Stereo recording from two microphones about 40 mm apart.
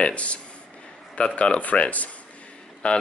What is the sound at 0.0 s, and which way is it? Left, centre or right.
Speech, left.